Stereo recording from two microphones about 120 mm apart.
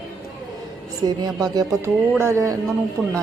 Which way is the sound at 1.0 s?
35° right (ahead or behind).